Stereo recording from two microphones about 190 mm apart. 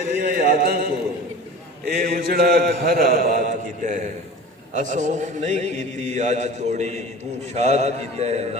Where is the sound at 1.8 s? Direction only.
55° right (ahead or behind).